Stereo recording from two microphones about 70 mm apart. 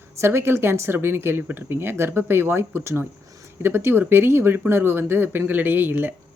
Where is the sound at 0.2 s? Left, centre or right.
Right.